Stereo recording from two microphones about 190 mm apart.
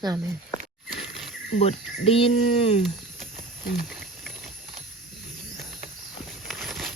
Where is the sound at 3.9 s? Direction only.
Centre (ahead or behind).